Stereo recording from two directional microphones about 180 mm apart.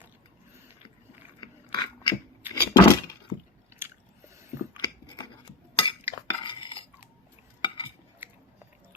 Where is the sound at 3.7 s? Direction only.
15° right (ahead or behind).